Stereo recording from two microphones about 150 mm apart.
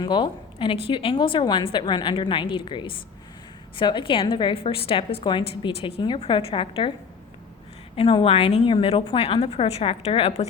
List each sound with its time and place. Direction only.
0.0 s a woman's voice: 30° left (ahead or behind)
7.9 s a woman's voice: 35° left (ahead or behind)